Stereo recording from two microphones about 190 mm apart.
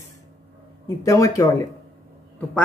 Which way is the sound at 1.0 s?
15° left (ahead or behind).